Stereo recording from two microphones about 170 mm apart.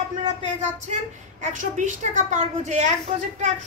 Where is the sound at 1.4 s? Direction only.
45° right (ahead or behind).